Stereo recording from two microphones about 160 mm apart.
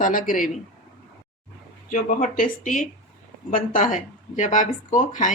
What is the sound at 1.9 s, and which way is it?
Speech, 60° left (ahead or behind).